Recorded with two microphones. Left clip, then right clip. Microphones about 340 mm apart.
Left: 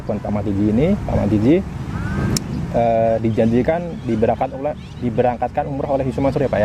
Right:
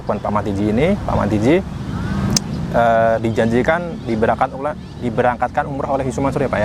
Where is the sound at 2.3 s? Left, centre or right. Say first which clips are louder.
Right 4 dB; right.